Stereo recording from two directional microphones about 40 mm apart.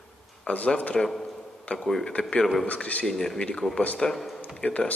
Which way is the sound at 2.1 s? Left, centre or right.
Left.